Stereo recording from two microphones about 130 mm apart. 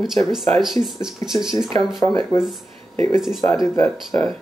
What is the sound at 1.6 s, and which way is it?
Speech, 30° left (ahead or behind).